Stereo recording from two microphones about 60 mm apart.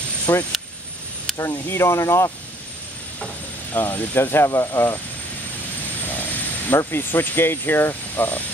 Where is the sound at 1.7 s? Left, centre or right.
Left.